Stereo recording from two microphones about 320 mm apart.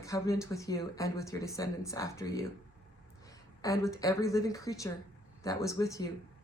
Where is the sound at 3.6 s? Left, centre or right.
Centre.